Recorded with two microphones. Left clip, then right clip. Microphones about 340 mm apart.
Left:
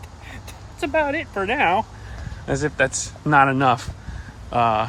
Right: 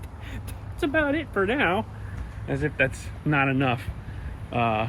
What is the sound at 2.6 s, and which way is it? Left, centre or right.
Speech, left.